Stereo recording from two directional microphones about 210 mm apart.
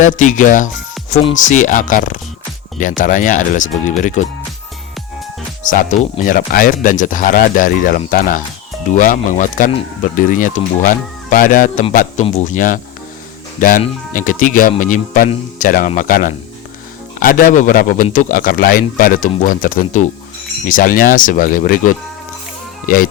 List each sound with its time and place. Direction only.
0.0 s speech: 35° left (ahead or behind)
5.6 s speech: 35° left (ahead or behind)